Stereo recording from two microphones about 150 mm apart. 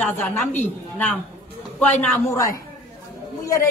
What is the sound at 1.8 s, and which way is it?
Speech, 10° left (ahead or behind).